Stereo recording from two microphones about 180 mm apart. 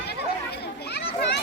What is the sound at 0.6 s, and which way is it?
Children playing, 65° left (ahead or behind).